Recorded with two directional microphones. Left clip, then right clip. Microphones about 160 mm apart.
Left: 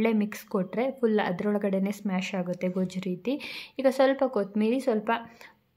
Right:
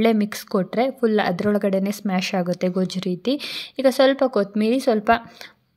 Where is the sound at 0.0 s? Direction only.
25° right (ahead or behind).